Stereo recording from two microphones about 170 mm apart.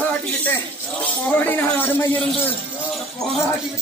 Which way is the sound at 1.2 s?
10° left (ahead or behind).